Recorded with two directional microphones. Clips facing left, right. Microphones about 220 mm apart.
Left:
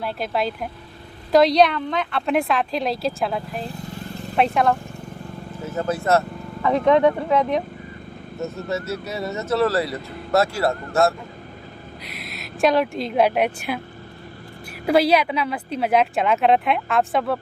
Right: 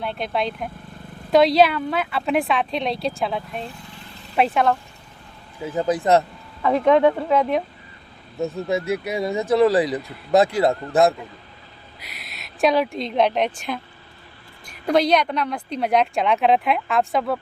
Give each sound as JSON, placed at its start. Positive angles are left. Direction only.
{"t": 0.0, "sound": "speech", "side_deg": 5}
{"t": 5.6, "sound": "speech", "side_deg": -15}
{"t": 6.6, "sound": "speech", "side_deg": 0}
{"t": 8.4, "sound": "speech", "side_deg": -15}
{"t": 12.0, "sound": "speech", "side_deg": 0}
{"t": 14.8, "sound": "speech", "side_deg": 5}